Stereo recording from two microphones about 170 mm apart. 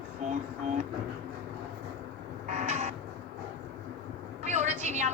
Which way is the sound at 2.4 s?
45° right (ahead or behind).